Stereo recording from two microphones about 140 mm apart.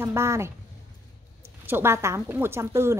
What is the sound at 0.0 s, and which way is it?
Speech, 20° right (ahead or behind).